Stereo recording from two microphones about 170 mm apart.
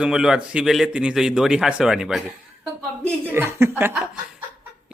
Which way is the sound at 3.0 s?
15° right (ahead or behind).